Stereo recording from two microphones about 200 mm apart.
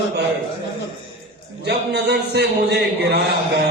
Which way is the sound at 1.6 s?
55° right (ahead or behind).